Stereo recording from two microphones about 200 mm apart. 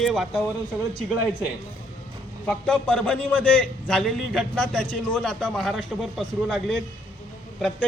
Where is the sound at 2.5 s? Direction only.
5° left (ahead or behind).